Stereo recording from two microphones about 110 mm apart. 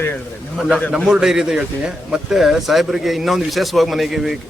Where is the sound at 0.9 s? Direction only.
5° right (ahead or behind).